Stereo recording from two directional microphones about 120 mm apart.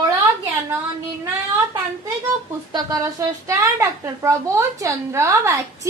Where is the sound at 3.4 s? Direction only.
25° right (ahead or behind).